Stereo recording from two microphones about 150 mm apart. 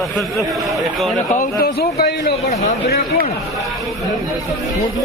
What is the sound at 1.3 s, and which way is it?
Speech, 75° left (ahead or behind).